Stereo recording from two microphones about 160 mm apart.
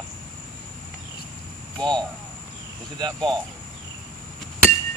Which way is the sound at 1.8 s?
25° right (ahead or behind).